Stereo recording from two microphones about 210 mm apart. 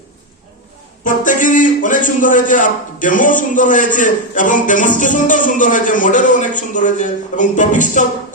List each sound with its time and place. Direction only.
1.0 s a man's voice: 40° left (ahead or behind)